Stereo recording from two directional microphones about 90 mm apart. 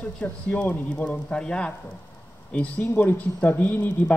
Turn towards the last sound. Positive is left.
turn(degrees=20)  # may be behind; listen again after turning